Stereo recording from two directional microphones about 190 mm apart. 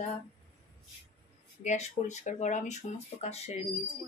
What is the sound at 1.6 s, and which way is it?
Speech, 40° left (ahead or behind).